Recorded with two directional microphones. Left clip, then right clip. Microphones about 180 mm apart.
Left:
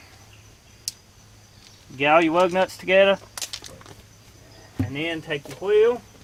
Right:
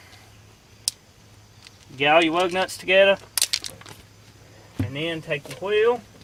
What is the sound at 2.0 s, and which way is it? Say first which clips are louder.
Speech: left 1 dB; 35° left (ahead or behind).